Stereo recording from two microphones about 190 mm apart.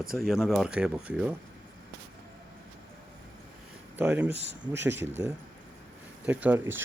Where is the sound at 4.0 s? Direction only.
10° right (ahead or behind).